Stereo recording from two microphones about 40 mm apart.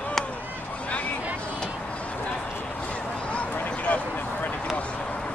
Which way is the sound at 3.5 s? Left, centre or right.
Left.